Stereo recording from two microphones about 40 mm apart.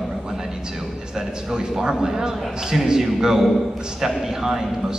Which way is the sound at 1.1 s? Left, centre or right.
Centre.